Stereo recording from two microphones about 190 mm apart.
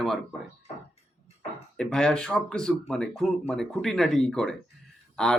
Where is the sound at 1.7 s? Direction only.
5° left (ahead or behind).